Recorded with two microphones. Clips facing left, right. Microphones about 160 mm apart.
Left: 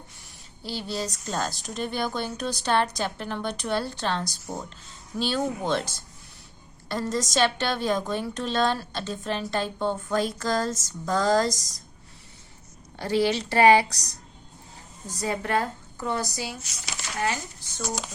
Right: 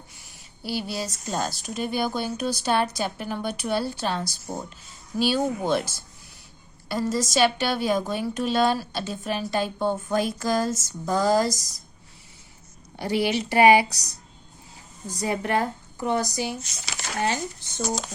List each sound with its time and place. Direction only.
0.6 s a woman's voice: 10° right (ahead or behind)
6.8 s a woman's voice: 10° right (ahead or behind)
13.0 s a woman's voice: 15° right (ahead or behind)
15.1 s a woman's voice: 15° right (ahead or behind)